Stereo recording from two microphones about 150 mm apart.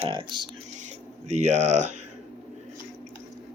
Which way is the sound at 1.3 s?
55° right (ahead or behind).